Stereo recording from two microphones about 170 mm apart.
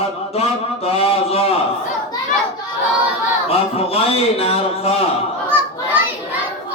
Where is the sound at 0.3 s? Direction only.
35° left (ahead or behind).